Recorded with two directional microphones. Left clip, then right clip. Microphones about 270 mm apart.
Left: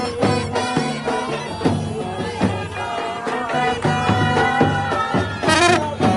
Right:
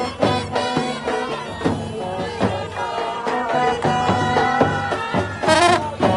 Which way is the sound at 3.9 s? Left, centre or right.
Right.